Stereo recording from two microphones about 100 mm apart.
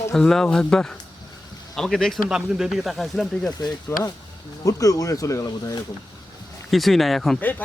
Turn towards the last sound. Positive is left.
turn(degrees=20)  # may be behind; listen again after turning